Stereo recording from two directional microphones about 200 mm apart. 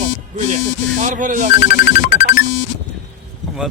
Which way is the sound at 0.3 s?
40° right (ahead or behind).